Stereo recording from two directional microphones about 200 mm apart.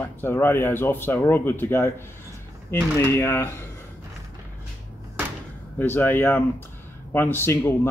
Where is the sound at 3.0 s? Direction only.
10° left (ahead or behind).